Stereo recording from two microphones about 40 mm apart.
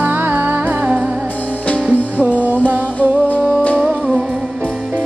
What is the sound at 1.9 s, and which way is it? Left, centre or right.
Music, right.